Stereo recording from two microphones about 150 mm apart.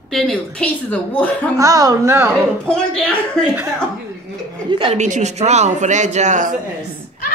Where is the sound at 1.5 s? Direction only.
25° right (ahead or behind).